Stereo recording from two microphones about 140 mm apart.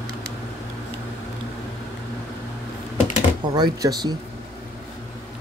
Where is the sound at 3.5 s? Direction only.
30° right (ahead or behind).